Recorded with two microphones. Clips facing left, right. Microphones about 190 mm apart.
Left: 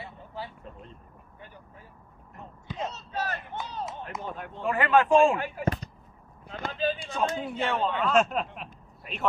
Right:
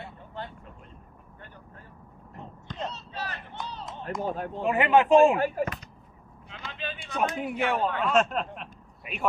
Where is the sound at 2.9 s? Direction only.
45° left (ahead or behind).